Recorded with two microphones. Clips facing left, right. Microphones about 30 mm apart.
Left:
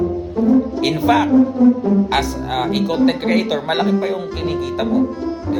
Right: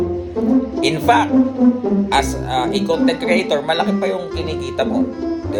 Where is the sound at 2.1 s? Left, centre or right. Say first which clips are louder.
Right 2 dB; centre.